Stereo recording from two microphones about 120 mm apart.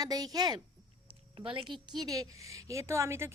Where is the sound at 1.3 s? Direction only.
45° right (ahead or behind).